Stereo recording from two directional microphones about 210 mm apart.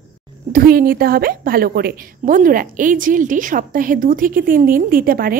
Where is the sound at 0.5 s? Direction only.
45° right (ahead or behind).